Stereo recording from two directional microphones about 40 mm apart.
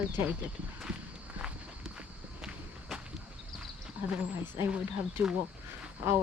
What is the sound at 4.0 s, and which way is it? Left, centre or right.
Speech, right.